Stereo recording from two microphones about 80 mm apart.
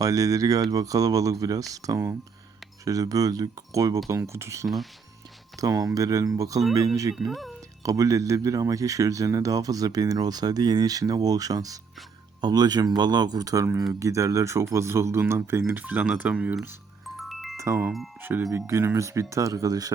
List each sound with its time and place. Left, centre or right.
0.0 s speech: right
7.3 s speech: centre
7.9 s speech: right
12.4 s speech: right
15.8 s speech: centre
17.2 s music: centre
18.2 s speech: right